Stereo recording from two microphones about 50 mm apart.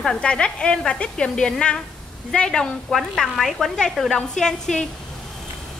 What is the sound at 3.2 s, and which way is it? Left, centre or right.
A woman's voice, centre.